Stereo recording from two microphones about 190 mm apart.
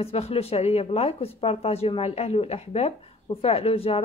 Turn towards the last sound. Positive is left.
turn(degrees=30)  # may be behind; listen again after turning